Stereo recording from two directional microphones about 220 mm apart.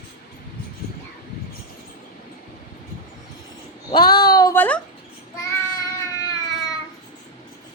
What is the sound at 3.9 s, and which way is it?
Child singing, 20° left (ahead or behind).